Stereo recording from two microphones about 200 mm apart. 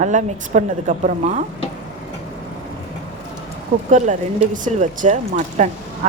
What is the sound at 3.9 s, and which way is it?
Speech, 40° right (ahead or behind).